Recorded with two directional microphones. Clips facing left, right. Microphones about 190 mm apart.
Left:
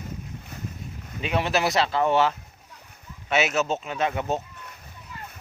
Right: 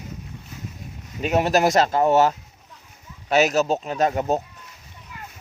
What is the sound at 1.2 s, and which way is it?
Speech, 45° right (ahead or behind).